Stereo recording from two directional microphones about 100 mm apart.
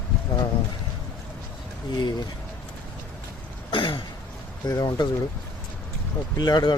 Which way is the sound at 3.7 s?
60° left (ahead or behind).